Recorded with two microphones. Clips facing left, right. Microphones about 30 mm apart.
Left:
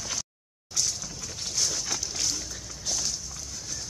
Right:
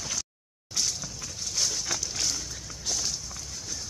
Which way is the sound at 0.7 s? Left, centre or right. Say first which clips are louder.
Even; centre.